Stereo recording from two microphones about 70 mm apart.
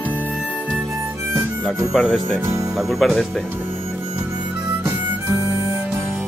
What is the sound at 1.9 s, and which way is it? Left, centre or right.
Speech, centre.